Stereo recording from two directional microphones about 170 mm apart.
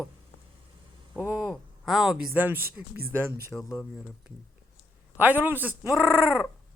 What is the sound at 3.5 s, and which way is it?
Speech, centre (ahead or behind).